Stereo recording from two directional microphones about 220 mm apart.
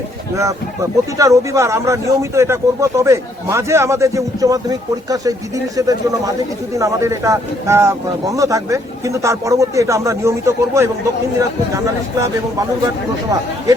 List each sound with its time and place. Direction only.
0.3 s speech: 15° right (ahead or behind)